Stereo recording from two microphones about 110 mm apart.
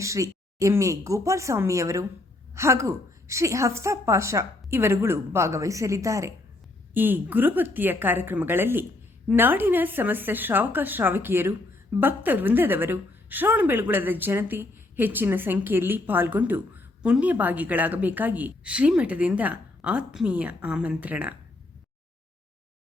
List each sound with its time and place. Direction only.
0.0 s a woman's voice: 30° right (ahead or behind)
6.9 s a woman's voice: 20° right (ahead or behind)